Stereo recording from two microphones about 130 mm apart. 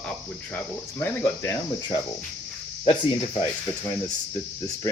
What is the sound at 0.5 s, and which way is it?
Speech, 15° left (ahead or behind).